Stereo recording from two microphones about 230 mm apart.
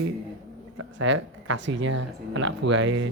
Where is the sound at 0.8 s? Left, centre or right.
Right.